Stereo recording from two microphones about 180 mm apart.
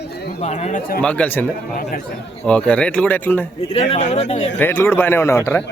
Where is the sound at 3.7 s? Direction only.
35° left (ahead or behind).